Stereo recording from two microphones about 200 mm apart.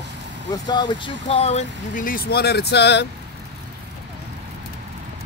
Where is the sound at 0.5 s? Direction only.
20° left (ahead or behind); by 3.0 s 55° left (ahead or behind).